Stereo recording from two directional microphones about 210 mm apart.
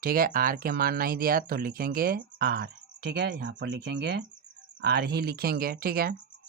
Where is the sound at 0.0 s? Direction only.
45° right (ahead or behind).